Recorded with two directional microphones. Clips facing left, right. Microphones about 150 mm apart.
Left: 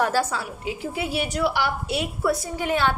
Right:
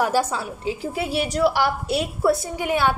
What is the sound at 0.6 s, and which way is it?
A woman's voice, 30° right (ahead or behind).